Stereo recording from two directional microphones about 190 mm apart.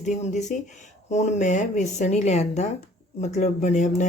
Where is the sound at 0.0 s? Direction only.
40° left (ahead or behind).